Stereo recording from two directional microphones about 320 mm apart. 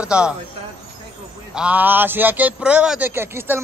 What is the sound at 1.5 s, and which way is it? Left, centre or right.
A man's voice, centre.